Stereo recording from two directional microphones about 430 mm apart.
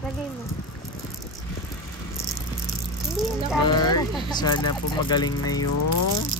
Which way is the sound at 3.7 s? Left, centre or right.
Centre.